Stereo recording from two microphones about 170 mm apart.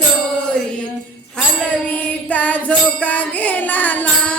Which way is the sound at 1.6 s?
10° left (ahead or behind).